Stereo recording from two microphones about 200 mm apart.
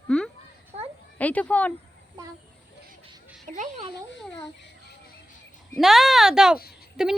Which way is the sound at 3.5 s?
40° right (ahead or behind).